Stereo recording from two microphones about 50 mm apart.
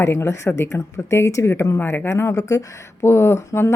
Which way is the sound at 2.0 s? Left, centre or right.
Left.